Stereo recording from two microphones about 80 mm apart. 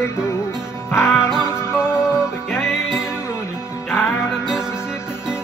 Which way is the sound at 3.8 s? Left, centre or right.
Left.